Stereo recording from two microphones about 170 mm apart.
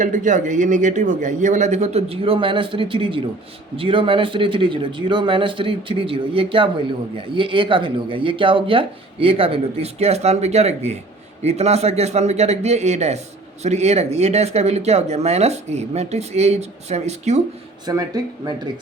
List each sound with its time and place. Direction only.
0.0 s a man's voice: 45° right (ahead or behind)
17.8 s speech: 20° right (ahead or behind)